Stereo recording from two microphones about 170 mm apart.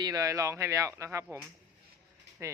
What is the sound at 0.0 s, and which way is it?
Speech, 20° right (ahead or behind).